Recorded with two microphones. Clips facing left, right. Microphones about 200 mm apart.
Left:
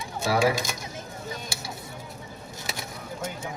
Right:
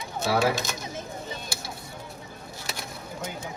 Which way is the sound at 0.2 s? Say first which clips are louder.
Left 1 dB; 10° left (ahead or behind).